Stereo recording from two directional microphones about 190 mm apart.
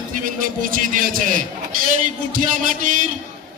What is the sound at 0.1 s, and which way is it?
A man's voice, 45° right (ahead or behind).